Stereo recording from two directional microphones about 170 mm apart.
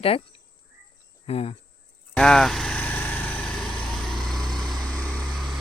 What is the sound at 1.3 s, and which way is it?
Speech, 35° left (ahead or behind).